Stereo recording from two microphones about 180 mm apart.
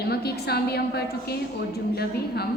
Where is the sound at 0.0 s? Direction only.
60° left (ahead or behind).